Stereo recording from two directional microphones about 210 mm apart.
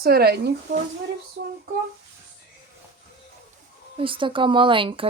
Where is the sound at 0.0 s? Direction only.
45° right (ahead or behind).